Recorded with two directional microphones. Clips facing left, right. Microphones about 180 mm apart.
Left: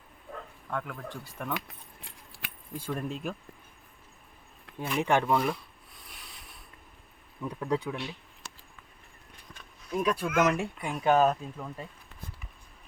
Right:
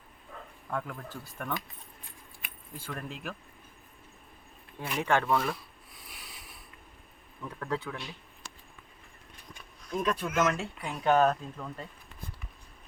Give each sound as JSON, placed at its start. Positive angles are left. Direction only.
{"t": 0.7, "sound": "speech", "side_deg": 0}
{"t": 1.5, "sound": "keys jangling", "side_deg": 80}
{"t": 2.7, "sound": "speech", "side_deg": 15}
{"t": 4.8, "sound": "speech", "side_deg": 15}
{"t": 7.4, "sound": "speech", "side_deg": 15}
{"t": 9.9, "sound": "speech", "side_deg": 10}
{"t": 10.8, "sound": "speech", "side_deg": 0}